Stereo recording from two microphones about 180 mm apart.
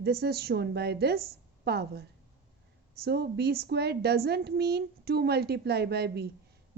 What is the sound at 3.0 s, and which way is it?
A woman's voice, 65° right (ahead or behind).